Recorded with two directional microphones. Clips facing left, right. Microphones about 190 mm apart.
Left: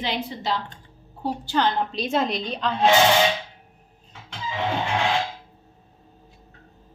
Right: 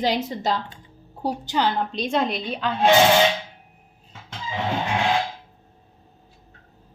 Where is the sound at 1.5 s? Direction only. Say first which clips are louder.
Left 1 dB; 10° right (ahead or behind).